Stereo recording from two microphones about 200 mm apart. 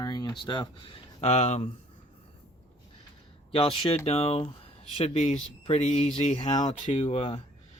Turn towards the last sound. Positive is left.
turn(degrees=30)  # may be behind; listen again after turning